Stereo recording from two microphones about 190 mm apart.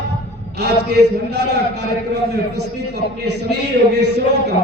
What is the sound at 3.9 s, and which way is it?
Speech, 60° right (ahead or behind).